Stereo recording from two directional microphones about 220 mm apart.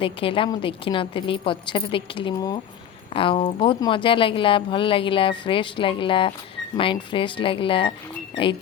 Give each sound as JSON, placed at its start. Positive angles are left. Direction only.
{"t": 0.0, "sound": "a woman's voice", "side_deg": 25}